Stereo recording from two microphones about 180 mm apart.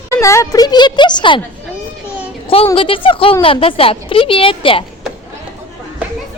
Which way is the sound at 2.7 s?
30° left (ahead or behind).